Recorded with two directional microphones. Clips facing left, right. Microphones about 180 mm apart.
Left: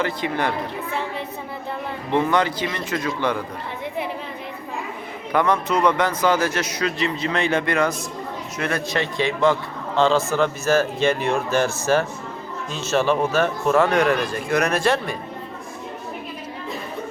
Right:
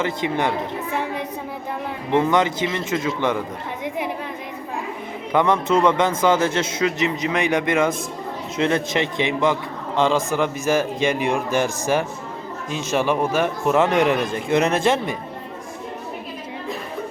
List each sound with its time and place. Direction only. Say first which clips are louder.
0.0 s a man's voice: right 1 dB; 20° right (ahead or behind)
2.0 s a man's voice: right 2 dB; 15° right (ahead or behind)
5.3 s a man's voice: right 2 dB; 20° right (ahead or behind)